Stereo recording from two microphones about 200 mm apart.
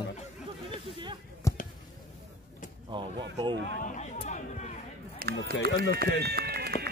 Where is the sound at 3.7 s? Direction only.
40° left (ahead or behind).